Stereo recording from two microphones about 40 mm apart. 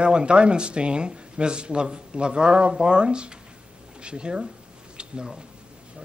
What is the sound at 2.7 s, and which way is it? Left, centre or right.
Speech, right.